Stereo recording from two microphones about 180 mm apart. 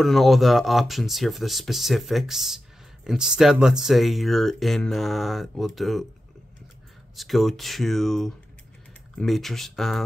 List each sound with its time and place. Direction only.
0.0 s speech: centre (ahead or behind)
7.2 s speech: centre (ahead or behind)